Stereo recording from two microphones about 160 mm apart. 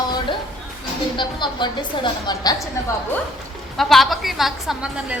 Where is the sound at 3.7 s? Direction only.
Centre (ahead or behind).